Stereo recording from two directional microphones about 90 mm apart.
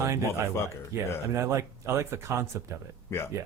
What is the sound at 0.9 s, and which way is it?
Speech, 35° right (ahead or behind).